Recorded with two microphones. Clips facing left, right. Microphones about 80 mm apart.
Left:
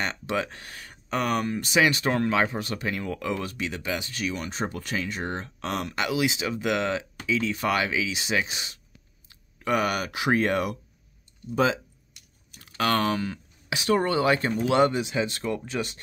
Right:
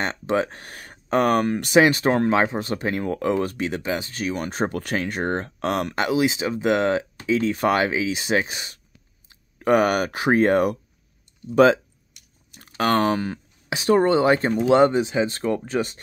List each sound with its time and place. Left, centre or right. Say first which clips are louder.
0.0 s speech: right 5 dB; right
1.8 s speech: right 6 dB; right
6.0 s speech: right 4 dB; right
11.5 s speech: right 9 dB; right
12.5 s speech: right 4 dB; right